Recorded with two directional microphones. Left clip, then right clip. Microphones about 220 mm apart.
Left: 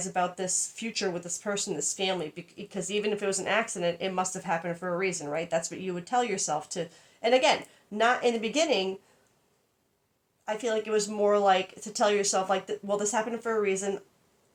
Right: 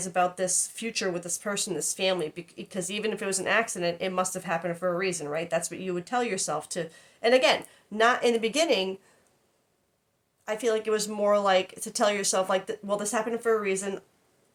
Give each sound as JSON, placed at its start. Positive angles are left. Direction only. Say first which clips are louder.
{"t": 0.1, "sound": "speech", "louder": "right 4 dB", "side_deg": -20}
{"t": 10.4, "sound": "speech", "louder": "right 3 dB", "side_deg": -20}